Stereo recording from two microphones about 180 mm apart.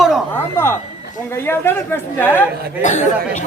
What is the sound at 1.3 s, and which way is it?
Speech, 10° left (ahead or behind).